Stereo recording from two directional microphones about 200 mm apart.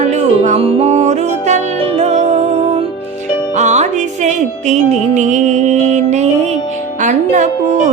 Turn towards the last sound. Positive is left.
turn(degrees=-40)  # may be behind; listen again after turning